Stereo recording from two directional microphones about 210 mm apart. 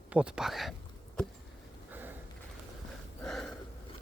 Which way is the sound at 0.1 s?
5° right (ahead or behind).